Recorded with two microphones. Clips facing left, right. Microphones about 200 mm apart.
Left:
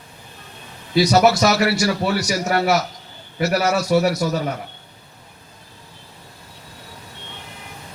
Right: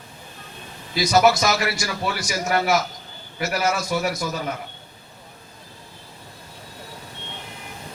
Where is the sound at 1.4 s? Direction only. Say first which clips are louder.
Left 6 dB; 40° left (ahead or behind).